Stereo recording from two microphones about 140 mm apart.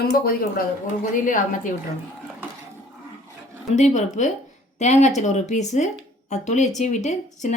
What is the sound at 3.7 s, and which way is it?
Speech, 55° left (ahead or behind).